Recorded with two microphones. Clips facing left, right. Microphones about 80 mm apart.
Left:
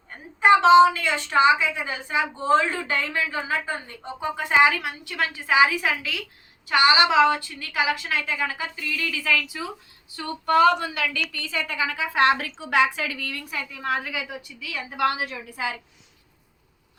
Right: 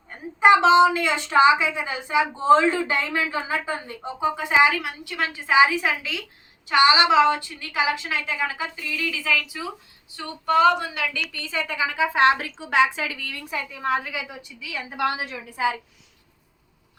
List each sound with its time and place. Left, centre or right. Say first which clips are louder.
0.3 s a woman's voice: left 1 dB; centre
5.2 s a woman's voice: right 1 dB; centre
11.3 s a woman's voice: right 3 dB; right
12.5 s a woman's voice: even; centre
12.7 s a woman's voice: right 1 dB; centre